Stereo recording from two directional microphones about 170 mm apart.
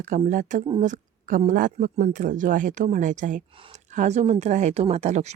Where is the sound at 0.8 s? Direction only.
50° right (ahead or behind).